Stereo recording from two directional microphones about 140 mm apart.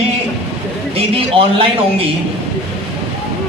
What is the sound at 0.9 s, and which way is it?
A man's voice, 45° right (ahead or behind).